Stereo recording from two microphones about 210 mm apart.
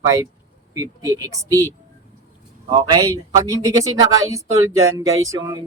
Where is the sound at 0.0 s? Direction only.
15° right (ahead or behind).